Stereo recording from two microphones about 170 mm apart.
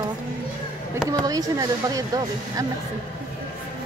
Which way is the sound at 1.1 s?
20° right (ahead or behind).